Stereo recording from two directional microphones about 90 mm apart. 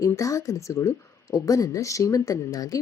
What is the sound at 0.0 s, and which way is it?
Speech, 35° left (ahead or behind).